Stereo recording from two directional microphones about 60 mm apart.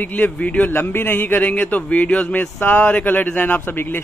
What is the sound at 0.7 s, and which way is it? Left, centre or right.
A man's voice, left.